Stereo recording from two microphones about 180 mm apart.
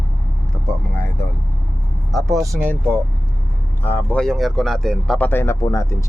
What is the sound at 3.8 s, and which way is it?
Speech, 10° left (ahead or behind).